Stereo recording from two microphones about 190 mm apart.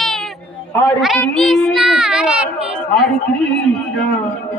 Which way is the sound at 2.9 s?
5° left (ahead or behind).